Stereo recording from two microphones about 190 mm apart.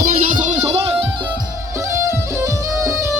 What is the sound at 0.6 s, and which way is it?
Music, 30° right (ahead or behind).